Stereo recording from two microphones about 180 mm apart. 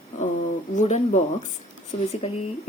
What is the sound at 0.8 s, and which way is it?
Speech, 40° left (ahead or behind).